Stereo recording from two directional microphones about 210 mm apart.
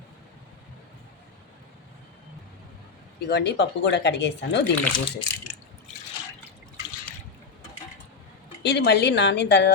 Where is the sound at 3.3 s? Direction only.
55° left (ahead or behind).